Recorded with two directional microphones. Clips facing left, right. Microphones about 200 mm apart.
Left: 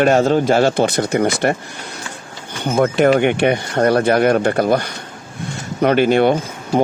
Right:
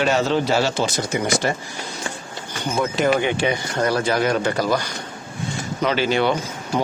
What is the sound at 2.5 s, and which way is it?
A man's voice, 60° left (ahead or behind).